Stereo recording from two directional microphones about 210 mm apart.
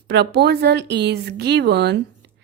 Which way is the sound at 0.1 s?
55° right (ahead or behind).